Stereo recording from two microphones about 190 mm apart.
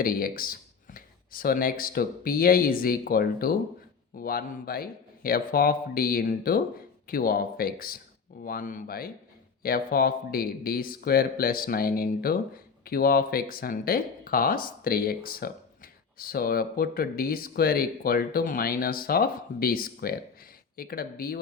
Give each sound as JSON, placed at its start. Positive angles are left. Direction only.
{"t": 0.0, "sound": "speech", "side_deg": 50}